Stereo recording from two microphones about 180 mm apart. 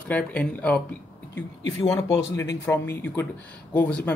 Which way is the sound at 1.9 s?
15° left (ahead or behind).